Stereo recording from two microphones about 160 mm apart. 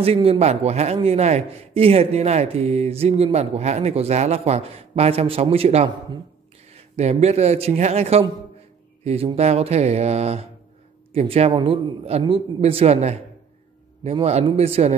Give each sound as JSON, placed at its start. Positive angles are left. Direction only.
{"t": 0.0, "sound": "a man's voice", "side_deg": -35}